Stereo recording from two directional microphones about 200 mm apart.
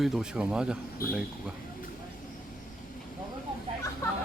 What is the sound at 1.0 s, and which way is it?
Speech, 45° left (ahead or behind).